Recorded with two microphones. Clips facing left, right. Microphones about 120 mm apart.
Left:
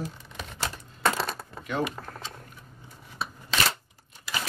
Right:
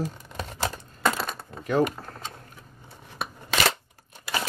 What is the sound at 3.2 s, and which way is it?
Scissors, 60° right (ahead or behind).